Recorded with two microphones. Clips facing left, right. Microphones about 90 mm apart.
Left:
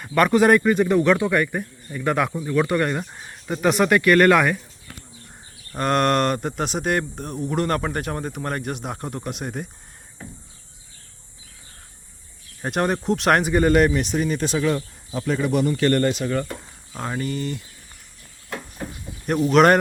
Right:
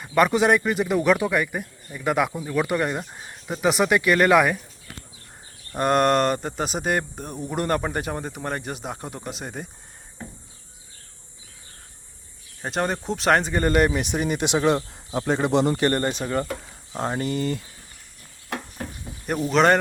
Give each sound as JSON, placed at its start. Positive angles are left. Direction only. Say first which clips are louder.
{"t": 0.0, "sound": "speech", "louder": "left 2 dB", "side_deg": -15}
{"t": 12.6, "sound": "speech", "louder": "left 3 dB", "side_deg": 5}
{"t": 19.3, "sound": "speech", "louder": "left 3 dB", "side_deg": 0}